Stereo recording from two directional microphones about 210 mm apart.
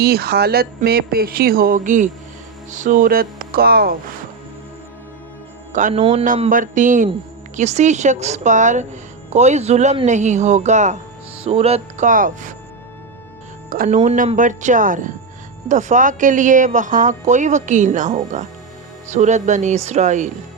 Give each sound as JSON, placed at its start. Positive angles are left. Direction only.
{"t": 0.0, "sound": "speech", "side_deg": -50}
{"t": 5.7, "sound": "a man's voice", "side_deg": -30}
{"t": 6.2, "sound": "speech", "side_deg": -40}
{"t": 13.7, "sound": "speech", "side_deg": -40}